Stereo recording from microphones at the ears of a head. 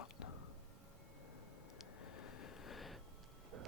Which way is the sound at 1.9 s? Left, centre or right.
Left.